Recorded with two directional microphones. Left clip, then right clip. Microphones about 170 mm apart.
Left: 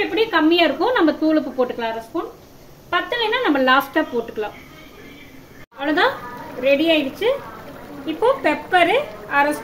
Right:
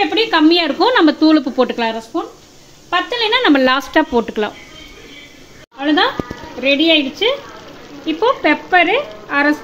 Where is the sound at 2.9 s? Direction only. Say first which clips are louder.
Right 5 dB; 50° right (ahead or behind).